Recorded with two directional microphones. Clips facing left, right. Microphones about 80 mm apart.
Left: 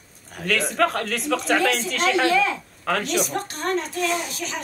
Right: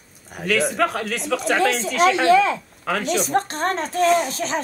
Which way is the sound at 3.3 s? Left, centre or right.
Right.